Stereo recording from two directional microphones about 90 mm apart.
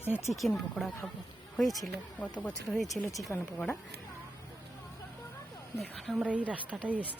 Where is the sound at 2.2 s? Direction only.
15° left (ahead or behind).